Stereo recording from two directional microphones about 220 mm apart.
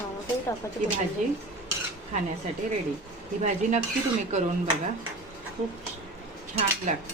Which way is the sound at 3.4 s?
35° right (ahead or behind).